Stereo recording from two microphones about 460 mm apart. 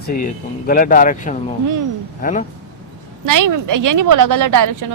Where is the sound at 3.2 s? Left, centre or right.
Right.